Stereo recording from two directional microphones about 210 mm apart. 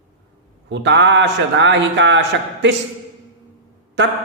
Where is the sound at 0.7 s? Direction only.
55° right (ahead or behind).